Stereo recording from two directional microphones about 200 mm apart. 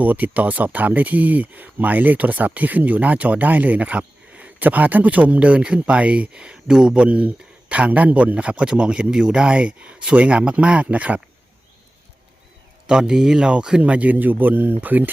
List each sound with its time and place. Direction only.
0.0 s speech: 10° right (ahead or behind)
12.9 s speech: 5° right (ahead or behind)